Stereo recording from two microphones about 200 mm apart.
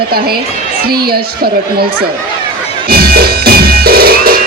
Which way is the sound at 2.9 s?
50° right (ahead or behind).